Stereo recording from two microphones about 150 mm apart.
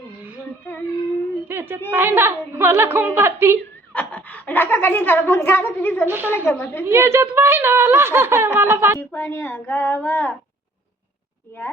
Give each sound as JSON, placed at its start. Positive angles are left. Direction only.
{"t": 1.5, "sound": "a woman's voice", "side_deg": -15}
{"t": 3.9, "sound": "speech", "side_deg": 10}
{"t": 6.1, "sound": "speech", "side_deg": -15}
{"t": 6.3, "sound": "speech", "side_deg": 15}
{"t": 6.8, "sound": "speech", "side_deg": -20}
{"t": 9.0, "sound": "speech", "side_deg": 20}